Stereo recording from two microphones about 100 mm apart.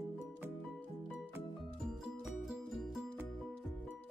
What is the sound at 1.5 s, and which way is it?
Music, centre (ahead or behind).